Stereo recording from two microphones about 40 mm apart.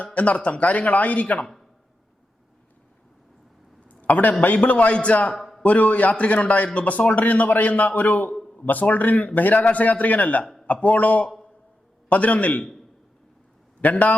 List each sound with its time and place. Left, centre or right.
0.0 s a man's voice: left
3.8 s a sound: left
4.4 s a man's voice: left
5.3 s a sound: centre
5.6 s a man's voice: left
13.9 s a man's voice: left